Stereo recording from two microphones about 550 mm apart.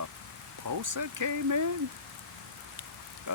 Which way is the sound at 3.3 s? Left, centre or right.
Right.